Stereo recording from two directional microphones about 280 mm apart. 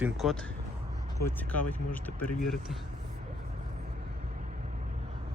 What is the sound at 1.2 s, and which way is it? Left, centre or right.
Speech, left.